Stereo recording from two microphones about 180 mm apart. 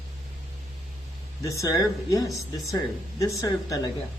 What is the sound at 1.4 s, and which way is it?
Speech, 20° left (ahead or behind).